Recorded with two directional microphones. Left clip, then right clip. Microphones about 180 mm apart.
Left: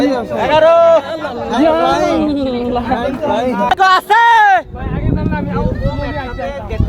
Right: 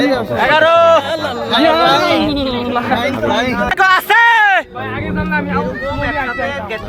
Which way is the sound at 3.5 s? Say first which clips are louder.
Left 2 dB; 5° right (ahead or behind).